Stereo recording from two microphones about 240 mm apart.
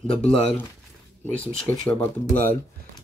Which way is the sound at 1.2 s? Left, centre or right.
Centre.